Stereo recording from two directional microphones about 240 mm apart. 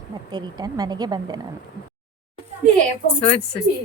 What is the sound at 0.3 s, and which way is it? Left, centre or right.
Speech, centre.